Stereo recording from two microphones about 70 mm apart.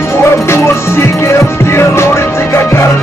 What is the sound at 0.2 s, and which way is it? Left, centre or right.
Music, left.